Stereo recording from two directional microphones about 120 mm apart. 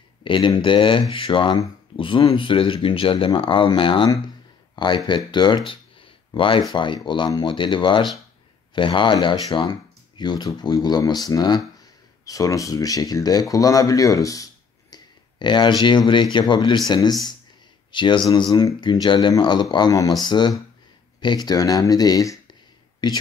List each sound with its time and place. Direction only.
0.2 s speech: 45° left (ahead or behind)
5.7 s a sound: 45° left (ahead or behind)
6.7 s speech: 40° left (ahead or behind)